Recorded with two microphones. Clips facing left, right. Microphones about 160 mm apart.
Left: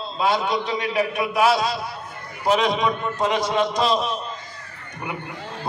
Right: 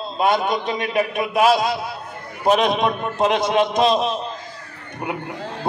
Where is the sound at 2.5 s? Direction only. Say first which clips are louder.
Right 2 dB; 55° right (ahead or behind).